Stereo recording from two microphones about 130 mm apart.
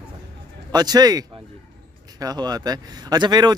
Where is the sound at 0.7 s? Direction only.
30° right (ahead or behind).